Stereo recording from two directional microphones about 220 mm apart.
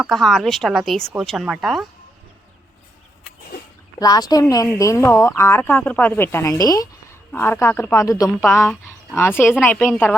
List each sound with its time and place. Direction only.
0.0 s speech: centre (ahead or behind)
4.0 s speech: 15° left (ahead or behind)